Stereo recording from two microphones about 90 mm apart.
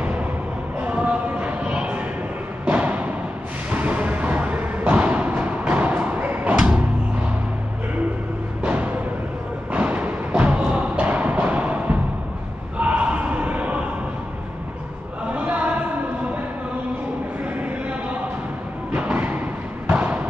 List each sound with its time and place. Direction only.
0.7 s a sound: 15° right (ahead or behind)
2.6 s thump: 15° right (ahead or behind)
3.7 s music: 15° right (ahead or behind)
8.6 s music: 15° right (ahead or behind)
9.7 s thump: 15° right (ahead or behind)
12.7 s a sound: 15° right (ahead or behind)
15.3 s a sound: 15° right (ahead or behind)
18.9 s thump: 20° right (ahead or behind)
19.9 s basketball bounce: 15° right (ahead or behind)